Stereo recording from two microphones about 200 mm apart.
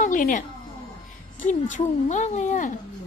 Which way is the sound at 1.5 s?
40° left (ahead or behind).